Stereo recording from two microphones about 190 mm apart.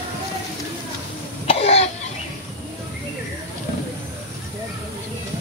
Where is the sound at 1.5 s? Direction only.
35° left (ahead or behind).